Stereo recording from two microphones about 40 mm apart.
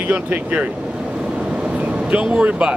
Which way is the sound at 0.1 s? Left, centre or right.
Right.